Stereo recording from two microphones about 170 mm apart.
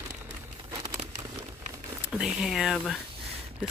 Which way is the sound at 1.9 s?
5° right (ahead or behind).